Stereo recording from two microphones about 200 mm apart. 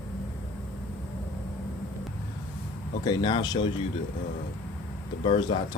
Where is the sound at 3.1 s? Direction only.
20° left (ahead or behind).